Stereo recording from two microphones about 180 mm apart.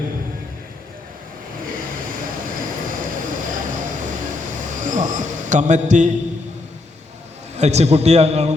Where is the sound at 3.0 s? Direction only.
45° right (ahead or behind).